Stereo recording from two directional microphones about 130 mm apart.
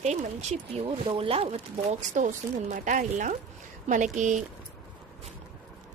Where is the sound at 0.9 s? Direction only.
45° right (ahead or behind); by 4.4 s 70° right (ahead or behind).